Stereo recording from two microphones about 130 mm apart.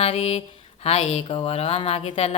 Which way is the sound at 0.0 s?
50° left (ahead or behind).